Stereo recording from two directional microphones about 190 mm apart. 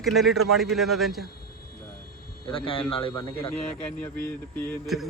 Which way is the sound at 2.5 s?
30° left (ahead or behind).